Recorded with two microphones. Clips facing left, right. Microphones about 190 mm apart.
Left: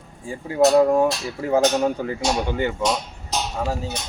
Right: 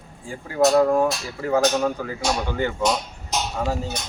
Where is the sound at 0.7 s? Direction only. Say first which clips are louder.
Left 2 dB; 15° left (ahead or behind).